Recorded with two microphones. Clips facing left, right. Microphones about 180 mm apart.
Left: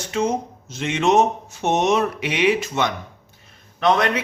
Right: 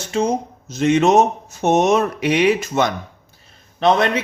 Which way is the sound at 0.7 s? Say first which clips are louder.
Right 5 dB; 40° right (ahead or behind).